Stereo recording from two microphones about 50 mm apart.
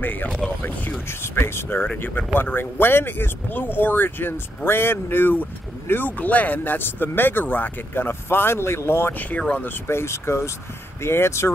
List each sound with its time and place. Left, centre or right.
0.0 s speech: left
1.2 s speech: left